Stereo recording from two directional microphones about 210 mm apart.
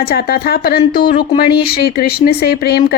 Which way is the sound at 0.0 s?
45° left (ahead or behind).